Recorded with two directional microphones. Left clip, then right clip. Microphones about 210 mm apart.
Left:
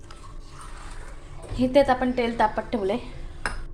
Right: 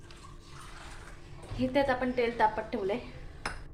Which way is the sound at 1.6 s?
20° left (ahead or behind).